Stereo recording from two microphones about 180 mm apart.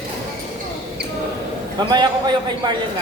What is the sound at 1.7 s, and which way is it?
A man's voice, 25° right (ahead or behind).